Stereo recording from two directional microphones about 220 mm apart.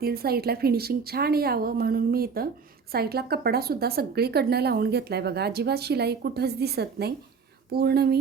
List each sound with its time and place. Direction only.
0.0 s a woman's voice: 45° right (ahead or behind)